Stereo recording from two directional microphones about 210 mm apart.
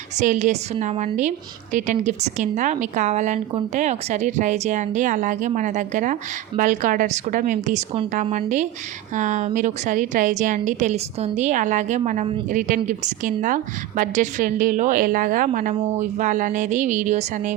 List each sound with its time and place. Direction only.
0.2 s a woman's voice: 35° right (ahead or behind)